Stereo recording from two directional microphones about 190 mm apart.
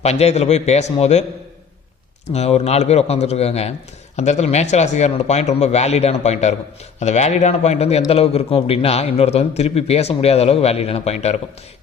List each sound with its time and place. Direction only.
0.0 s a man's voice: 35° left (ahead or behind)
2.2 s a man's voice: 35° left (ahead or behind)